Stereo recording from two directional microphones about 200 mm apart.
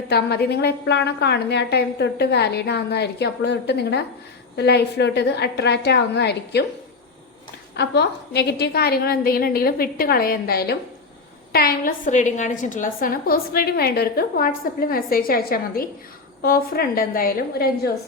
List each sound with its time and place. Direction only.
0.1 s a woman's voice: 55° left (ahead or behind)
7.8 s a woman's voice: 55° left (ahead or behind)